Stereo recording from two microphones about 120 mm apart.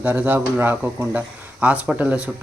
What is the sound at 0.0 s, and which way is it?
Speech, 15° right (ahead or behind).